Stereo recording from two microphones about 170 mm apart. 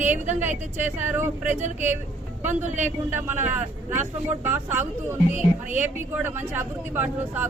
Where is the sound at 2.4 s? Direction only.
45° right (ahead or behind).